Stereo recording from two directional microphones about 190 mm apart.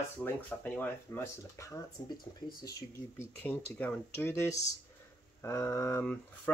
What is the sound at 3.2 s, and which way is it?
Speech, 10° left (ahead or behind).